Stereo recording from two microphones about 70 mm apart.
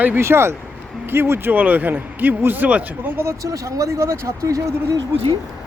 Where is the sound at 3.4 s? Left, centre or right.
Right.